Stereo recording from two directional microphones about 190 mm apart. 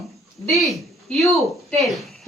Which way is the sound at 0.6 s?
Centre (ahead or behind).